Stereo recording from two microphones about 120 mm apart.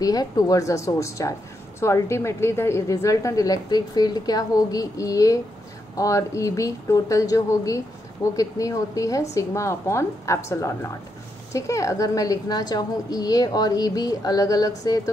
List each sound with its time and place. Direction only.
0.0 s a woman's voice: 30° left (ahead or behind)